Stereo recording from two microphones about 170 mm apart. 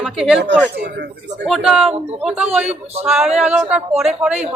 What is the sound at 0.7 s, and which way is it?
Speech, 90° right.